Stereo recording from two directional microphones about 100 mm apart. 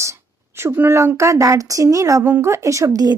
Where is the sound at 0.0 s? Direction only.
30° right (ahead or behind).